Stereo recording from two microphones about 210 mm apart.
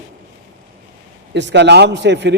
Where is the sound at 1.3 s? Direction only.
55° right (ahead or behind).